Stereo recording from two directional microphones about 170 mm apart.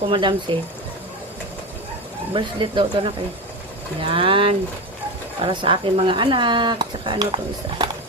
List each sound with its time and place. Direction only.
0.1 s speech: 30° right (ahead or behind)
2.3 s speech: 30° right (ahead or behind)